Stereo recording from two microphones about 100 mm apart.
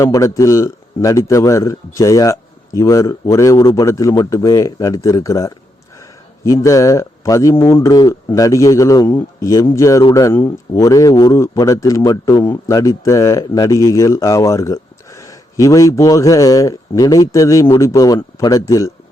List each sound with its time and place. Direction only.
0.0 s a man's voice: 35° left (ahead or behind)